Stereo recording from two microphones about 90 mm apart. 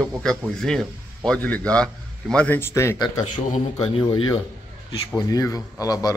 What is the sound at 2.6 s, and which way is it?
Speech, 30° left (ahead or behind).